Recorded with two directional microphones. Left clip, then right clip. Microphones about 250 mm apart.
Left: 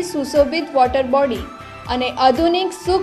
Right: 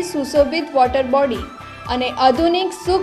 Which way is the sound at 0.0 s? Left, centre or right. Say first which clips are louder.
Even; centre.